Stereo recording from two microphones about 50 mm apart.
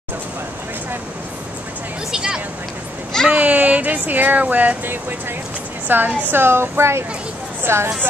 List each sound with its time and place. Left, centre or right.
2.1 s vehicle: centre
3.3 s a sound: right
5.9 s a woman's voice: right